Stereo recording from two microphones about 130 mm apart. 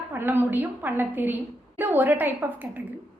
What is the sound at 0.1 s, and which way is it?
A woman's voice, 15° right (ahead or behind).